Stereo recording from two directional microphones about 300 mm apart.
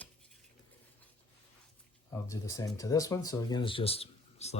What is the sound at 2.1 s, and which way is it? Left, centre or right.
Speech, centre.